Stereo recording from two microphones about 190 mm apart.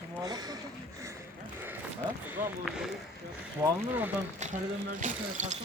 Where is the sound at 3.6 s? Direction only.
10° right (ahead or behind).